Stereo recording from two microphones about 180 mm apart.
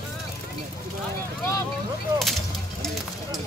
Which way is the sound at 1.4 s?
15° left (ahead or behind).